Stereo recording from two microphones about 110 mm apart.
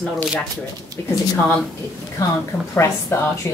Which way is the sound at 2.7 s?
25° left (ahead or behind).